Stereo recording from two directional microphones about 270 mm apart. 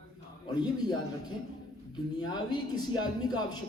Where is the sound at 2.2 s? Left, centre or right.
Centre.